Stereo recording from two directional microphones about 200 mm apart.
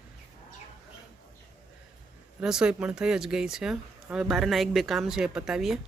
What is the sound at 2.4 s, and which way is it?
Speech, 5° right (ahead or behind).